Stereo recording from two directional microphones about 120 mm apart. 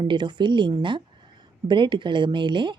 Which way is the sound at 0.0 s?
40° right (ahead or behind).